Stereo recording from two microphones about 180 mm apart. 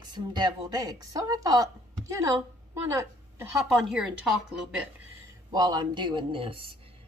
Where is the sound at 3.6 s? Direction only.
Centre (ahead or behind).